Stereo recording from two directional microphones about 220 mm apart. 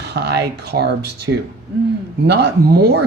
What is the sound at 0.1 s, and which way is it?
Speech, 50° right (ahead or behind).